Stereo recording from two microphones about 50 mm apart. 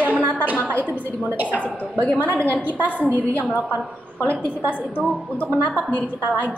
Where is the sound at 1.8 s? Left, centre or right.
Left.